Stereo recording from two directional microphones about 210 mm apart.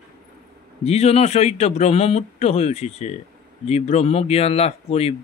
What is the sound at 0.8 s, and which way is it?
Speech, 30° left (ahead or behind).